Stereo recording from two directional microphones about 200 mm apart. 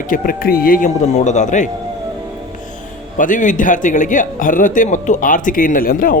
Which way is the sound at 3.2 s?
40° left (ahead or behind).